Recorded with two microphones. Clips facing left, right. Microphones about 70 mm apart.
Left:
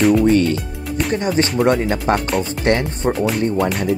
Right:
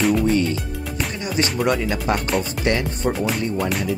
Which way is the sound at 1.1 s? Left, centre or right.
Left.